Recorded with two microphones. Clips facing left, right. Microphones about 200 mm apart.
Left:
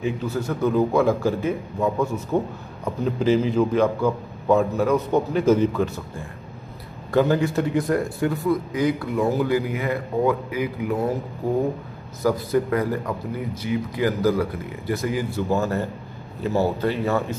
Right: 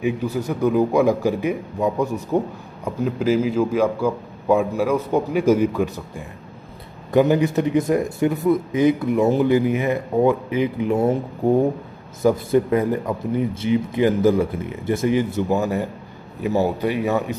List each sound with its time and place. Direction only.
0.0 s a man's voice: 15° right (ahead or behind)
12.2 s a man's voice: 20° right (ahead or behind)